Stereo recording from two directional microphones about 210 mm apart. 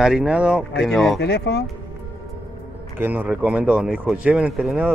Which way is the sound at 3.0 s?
10° right (ahead or behind).